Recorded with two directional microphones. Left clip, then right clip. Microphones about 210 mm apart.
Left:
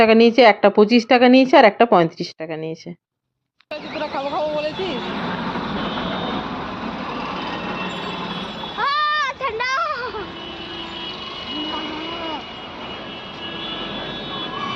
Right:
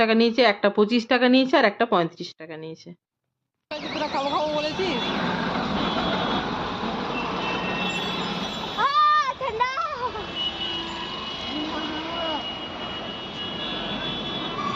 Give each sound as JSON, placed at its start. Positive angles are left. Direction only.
{"t": 0.0, "sound": "speech", "side_deg": 25}
{"t": 4.4, "sound": "speech", "side_deg": 0}
{"t": 8.8, "sound": "a sound", "side_deg": 50}